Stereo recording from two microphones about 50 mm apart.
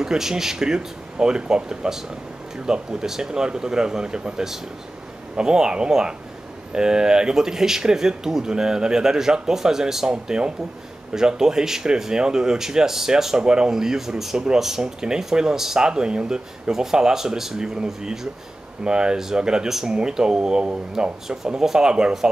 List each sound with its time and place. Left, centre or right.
0.0 s speech: centre